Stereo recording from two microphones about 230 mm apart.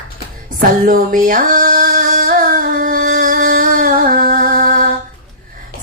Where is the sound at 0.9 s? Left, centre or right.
Right.